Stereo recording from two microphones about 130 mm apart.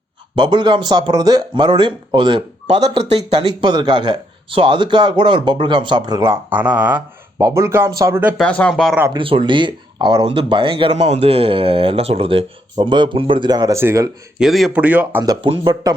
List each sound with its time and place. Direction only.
0.3 s speech: 35° right (ahead or behind)
2.9 s speech: 50° right (ahead or behind)
3.3 s speech: 35° right (ahead or behind)
6.2 s speech: 15° right (ahead or behind)
8.4 s speech: 10° left (ahead or behind)
9.1 s speech: 40° right (ahead or behind)
10.9 s speech: 60° right (ahead or behind); by 14.1 s 20° right (ahead or behind)
14.3 s speech: 5° right (ahead or behind)
15.4 s speech: 45° right (ahead or behind)
15.7 s speech: 30° right (ahead or behind)